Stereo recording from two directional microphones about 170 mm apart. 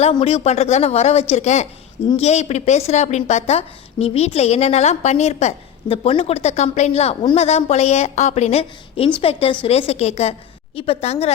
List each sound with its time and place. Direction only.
0.0 s a woman's voice: 35° left (ahead or behind)